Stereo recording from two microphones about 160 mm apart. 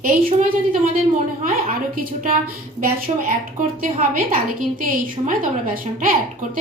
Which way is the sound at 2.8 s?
60° right (ahead or behind).